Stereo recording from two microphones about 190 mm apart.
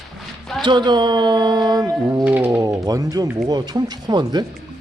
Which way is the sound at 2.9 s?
20° right (ahead or behind).